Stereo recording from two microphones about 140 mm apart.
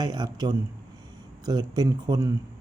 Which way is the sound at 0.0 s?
30° right (ahead or behind).